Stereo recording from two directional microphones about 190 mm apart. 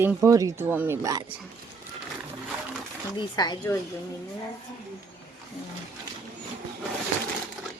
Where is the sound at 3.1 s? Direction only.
20° left (ahead or behind).